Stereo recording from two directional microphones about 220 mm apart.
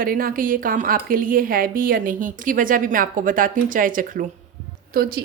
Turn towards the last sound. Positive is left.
turn(degrees=-45)  # may be behind; listen again after turning